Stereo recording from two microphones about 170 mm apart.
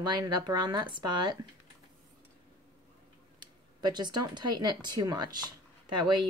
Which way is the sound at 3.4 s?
25° right (ahead or behind).